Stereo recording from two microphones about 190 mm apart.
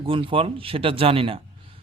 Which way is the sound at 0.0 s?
30° right (ahead or behind).